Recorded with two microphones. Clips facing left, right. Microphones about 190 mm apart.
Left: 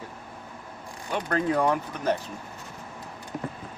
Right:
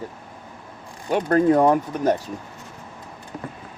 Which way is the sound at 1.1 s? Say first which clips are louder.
Right 9 dB; 45° right (ahead or behind).